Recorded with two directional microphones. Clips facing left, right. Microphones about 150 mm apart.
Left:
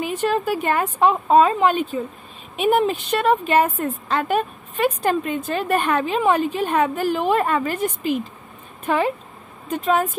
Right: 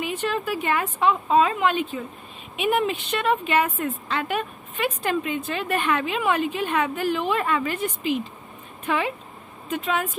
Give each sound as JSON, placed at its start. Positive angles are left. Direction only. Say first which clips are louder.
{"t": 0.0, "sound": "a woman's voice", "louder": "left 5 dB", "side_deg": 40}